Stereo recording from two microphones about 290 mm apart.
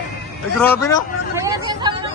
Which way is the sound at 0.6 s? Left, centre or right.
Centre.